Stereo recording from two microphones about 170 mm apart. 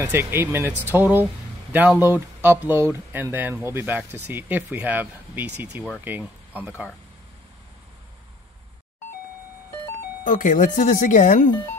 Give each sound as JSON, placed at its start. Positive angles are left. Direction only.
{"t": 0.0, "sound": "speech", "side_deg": -15}
{"t": 10.2, "sound": "speech", "side_deg": 50}